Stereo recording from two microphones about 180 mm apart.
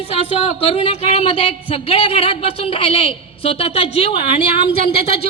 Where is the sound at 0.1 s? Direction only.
35° left (ahead or behind).